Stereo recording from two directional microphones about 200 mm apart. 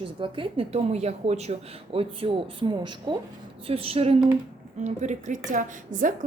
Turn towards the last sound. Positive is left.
turn(degrees=-40)  # may be behind; listen again after turning